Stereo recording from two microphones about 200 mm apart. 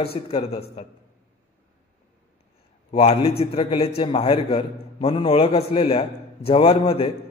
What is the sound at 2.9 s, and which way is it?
A man's voice, 30° left (ahead or behind).